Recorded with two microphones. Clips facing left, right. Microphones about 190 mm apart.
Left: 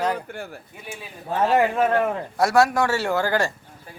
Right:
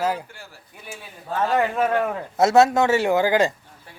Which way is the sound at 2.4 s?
20° right (ahead or behind).